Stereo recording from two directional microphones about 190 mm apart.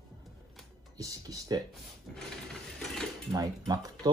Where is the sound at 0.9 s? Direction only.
20° right (ahead or behind).